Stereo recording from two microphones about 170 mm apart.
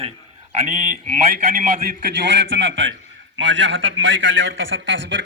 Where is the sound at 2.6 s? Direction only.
90° right.